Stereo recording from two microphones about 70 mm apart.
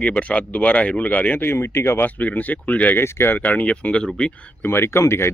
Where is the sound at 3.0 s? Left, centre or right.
Left.